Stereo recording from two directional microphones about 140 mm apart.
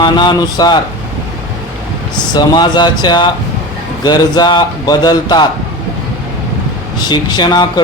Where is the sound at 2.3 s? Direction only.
30° left (ahead or behind).